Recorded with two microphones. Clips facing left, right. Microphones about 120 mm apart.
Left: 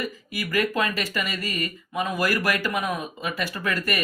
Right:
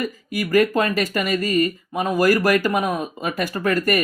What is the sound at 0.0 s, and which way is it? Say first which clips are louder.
Speech: right 6 dB; 45° right (ahead or behind).